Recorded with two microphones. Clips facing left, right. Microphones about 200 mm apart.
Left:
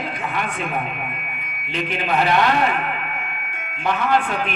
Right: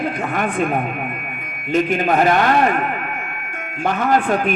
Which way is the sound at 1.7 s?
45° right (ahead or behind).